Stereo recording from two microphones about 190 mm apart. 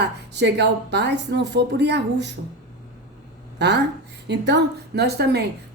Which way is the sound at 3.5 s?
65° right (ahead or behind).